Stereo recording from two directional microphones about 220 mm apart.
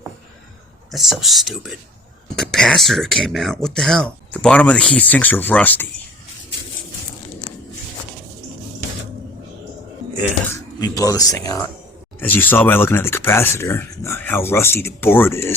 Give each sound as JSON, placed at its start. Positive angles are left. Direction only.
{"t": 0.9, "sound": "speech", "side_deg": 0}
{"t": 10.4, "sound": "speech", "side_deg": 15}